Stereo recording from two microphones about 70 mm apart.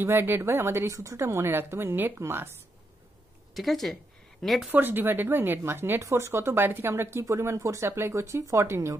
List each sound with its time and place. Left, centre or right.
0.0 s speech: right
3.5 s a woman's voice: centre
4.7 s speech: right